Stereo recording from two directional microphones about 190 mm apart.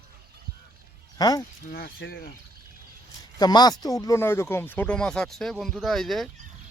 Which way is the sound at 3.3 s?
20° left (ahead or behind).